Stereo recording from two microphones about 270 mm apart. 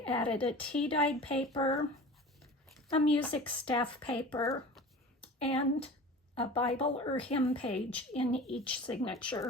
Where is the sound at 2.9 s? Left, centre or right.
Left.